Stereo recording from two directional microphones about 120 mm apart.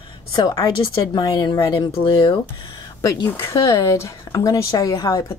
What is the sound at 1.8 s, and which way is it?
Speech, 45° left (ahead or behind).